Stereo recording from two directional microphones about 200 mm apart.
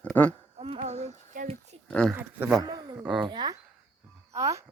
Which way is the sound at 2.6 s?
20° right (ahead or behind).